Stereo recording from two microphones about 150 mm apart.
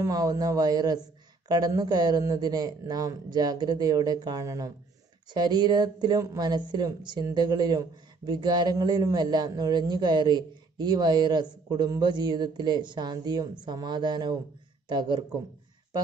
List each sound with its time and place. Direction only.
0.0 s a man's voice: 25° right (ahead or behind)